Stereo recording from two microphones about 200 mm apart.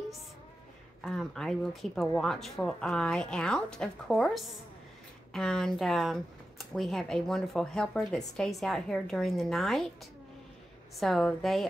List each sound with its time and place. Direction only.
1.0 s speech: centre (ahead or behind)
11.0 s speech: centre (ahead or behind)